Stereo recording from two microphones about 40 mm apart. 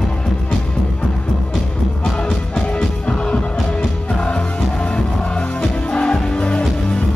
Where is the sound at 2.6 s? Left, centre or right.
Left.